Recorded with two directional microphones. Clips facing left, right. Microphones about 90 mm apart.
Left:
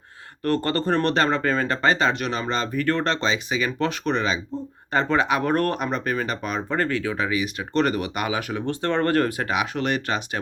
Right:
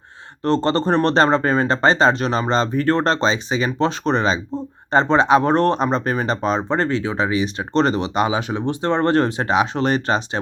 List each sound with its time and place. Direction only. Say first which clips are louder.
0.4 s speech: right 5 dB; 25° right (ahead or behind)